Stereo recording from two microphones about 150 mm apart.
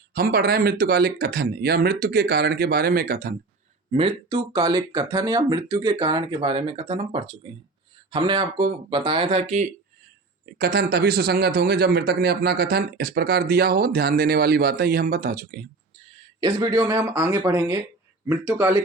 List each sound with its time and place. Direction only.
0.1 s speech: 90° right; by 3.3 s 70° right (ahead or behind)
3.9 s speech: 35° right (ahead or behind)
10.4 s speech: 90° right; by 15.6 s 70° right (ahead or behind)
16.4 s speech: 25° right (ahead or behind)